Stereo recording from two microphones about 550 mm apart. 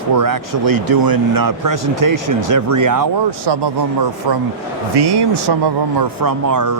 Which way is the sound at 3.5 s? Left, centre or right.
Right.